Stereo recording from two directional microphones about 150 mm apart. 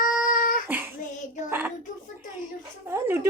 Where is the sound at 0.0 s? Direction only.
70° left (ahead or behind).